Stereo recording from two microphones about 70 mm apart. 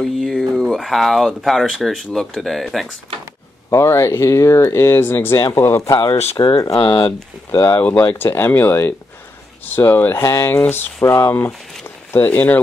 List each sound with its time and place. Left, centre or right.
0.0 s speech: centre
3.7 s speech: left
5.9 s speech: left
7.5 s speech: left
7.8 s speech: left
10.0 s speech: left
12.1 s speech: left